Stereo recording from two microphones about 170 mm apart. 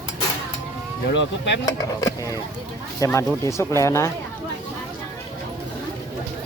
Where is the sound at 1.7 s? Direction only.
20° left (ahead or behind).